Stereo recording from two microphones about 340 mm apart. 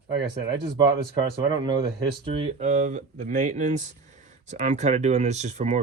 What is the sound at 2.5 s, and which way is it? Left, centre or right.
Speech, right.